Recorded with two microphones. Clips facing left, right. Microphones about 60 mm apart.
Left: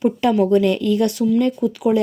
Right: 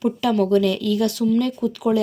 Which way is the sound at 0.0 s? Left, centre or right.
Left.